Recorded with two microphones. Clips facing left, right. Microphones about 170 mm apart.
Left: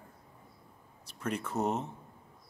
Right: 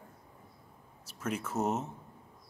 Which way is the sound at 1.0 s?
5° right (ahead or behind).